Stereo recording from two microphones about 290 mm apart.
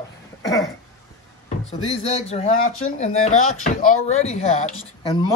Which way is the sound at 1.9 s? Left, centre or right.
Left.